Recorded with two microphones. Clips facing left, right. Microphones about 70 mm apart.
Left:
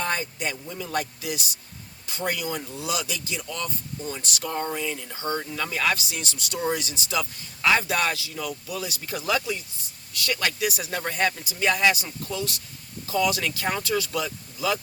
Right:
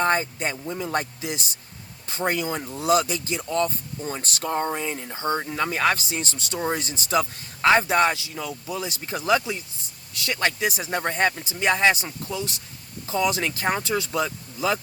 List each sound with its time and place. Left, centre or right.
0.0 s speech: right